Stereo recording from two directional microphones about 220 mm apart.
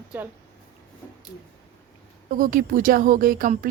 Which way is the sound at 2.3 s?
40° right (ahead or behind).